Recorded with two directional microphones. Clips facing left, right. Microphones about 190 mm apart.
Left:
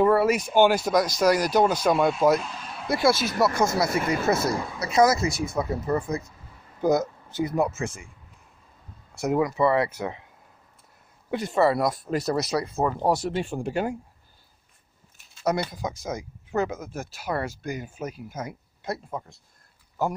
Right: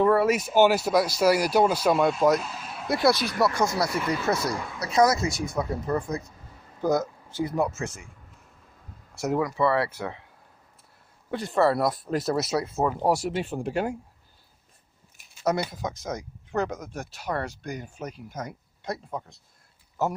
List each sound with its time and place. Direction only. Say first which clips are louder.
0.0 s speech: left 1 dB; centre (ahead or behind)
3.2 s speech: left 1 dB; 20° left (ahead or behind)
3.8 s speech: left 2 dB; 50° left (ahead or behind)
4.7 s speech: left 1 dB; 5° left (ahead or behind)
6.8 s speech: left 2 dB; 20° left (ahead or behind)
7.6 s speech: left 1 dB; centre (ahead or behind)
9.3 s speech: left 2 dB; 20° left (ahead or behind)
11.2 s speech: left 3 dB; 15° left (ahead or behind)
11.5 s speech: even; centre (ahead or behind)
15.4 s speech: even; 5° right (ahead or behind)
15.8 s speech: left 1 dB; 10° left (ahead or behind)